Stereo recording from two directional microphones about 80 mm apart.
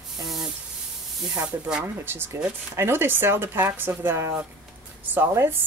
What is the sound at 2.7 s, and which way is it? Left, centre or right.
A woman's voice, right.